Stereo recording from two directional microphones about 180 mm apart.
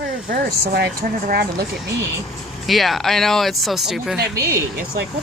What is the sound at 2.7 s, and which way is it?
Speech, centre (ahead or behind).